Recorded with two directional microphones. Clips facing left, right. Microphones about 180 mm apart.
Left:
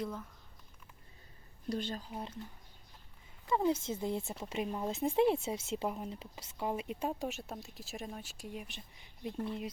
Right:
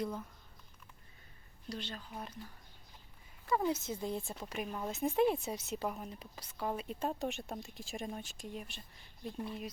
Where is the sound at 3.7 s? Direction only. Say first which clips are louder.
Left 3 dB; 25° left (ahead or behind).